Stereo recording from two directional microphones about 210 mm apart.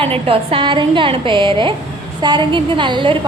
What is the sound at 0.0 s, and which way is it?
A woman's voice, 25° right (ahead or behind).